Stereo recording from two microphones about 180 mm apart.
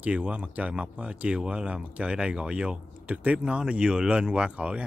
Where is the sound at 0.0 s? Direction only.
5° right (ahead or behind).